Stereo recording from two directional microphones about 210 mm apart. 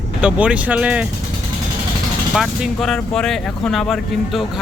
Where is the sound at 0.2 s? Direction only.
5° right (ahead or behind).